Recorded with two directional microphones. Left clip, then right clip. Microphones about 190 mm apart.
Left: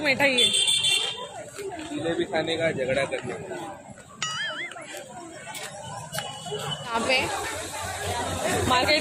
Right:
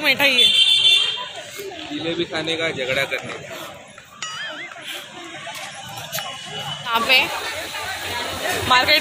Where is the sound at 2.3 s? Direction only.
30° right (ahead or behind).